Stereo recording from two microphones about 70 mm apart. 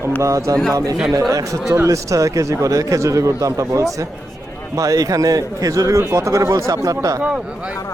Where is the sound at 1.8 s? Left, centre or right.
Right.